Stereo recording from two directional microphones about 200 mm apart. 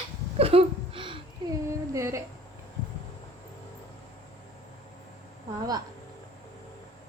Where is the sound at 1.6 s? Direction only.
15° right (ahead or behind).